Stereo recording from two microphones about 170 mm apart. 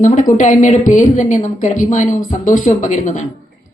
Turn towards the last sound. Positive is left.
turn(degrees=45)  # may be behind; listen again after turning